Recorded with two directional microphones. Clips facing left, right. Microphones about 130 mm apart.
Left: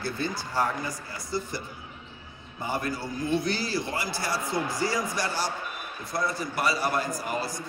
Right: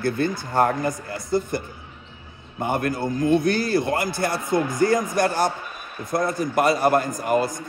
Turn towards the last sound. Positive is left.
turn(degrees=-50)  # may be behind; listen again after turning